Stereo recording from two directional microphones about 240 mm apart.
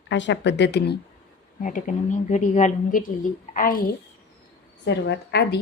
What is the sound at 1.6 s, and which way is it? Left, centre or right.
A woman's voice, left.